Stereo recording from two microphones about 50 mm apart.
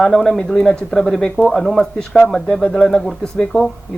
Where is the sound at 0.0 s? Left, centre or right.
Centre.